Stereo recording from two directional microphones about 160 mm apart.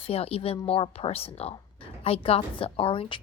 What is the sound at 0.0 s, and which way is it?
A woman's voice, 40° left (ahead or behind).